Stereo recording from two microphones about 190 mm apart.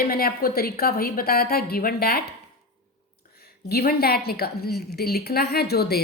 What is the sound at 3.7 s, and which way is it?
A woman's voice, 55° left (ahead or behind).